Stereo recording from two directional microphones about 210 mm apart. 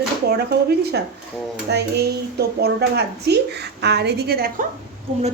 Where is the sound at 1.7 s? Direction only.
50° right (ahead or behind).